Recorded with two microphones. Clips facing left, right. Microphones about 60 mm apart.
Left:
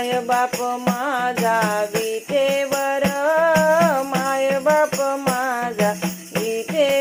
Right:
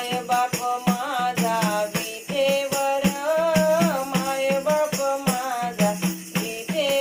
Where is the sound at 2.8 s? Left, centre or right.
Left.